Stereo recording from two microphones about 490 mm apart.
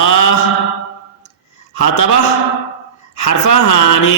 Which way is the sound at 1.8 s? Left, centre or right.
Left.